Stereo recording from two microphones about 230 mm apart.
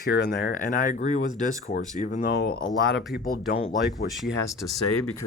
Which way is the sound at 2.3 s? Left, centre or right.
Left.